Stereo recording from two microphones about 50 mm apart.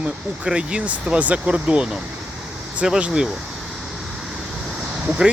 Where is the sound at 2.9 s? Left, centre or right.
Centre.